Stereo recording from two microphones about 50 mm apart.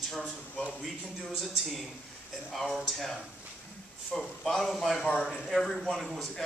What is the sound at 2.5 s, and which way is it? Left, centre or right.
Speech, centre.